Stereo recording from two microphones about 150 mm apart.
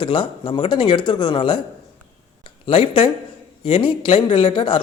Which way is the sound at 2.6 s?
35° left (ahead or behind).